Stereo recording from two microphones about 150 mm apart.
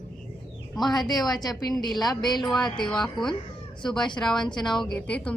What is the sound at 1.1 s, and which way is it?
A woman's voice, 25° left (ahead or behind).